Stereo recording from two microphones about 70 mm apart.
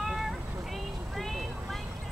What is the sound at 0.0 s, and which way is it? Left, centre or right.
Cat, centre.